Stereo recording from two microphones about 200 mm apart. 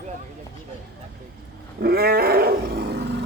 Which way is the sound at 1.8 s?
50° right (ahead or behind).